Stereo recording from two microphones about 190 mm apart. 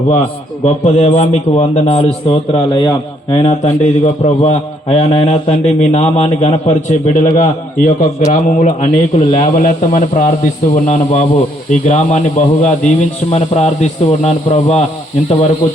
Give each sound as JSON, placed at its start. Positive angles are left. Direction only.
{"t": 0.6, "sound": "a man's voice", "side_deg": 35}
{"t": 3.6, "sound": "a man's voice", "side_deg": 35}